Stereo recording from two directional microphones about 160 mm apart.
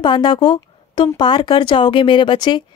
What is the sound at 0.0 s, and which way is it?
Speech, 30° left (ahead or behind).